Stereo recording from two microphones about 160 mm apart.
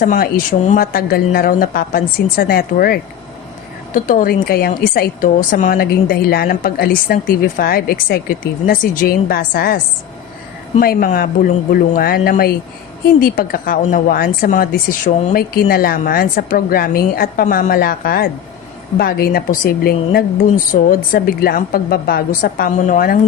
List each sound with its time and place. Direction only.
0.0 s speech: 55° left (ahead or behind)
0.8 s a woman's voice: 70° left (ahead or behind)
3.9 s a woman's voice: 55° left (ahead or behind)
5.7 s a woman's voice: 70° left (ahead or behind)
13.1 s a woman's voice: 65° left (ahead or behind)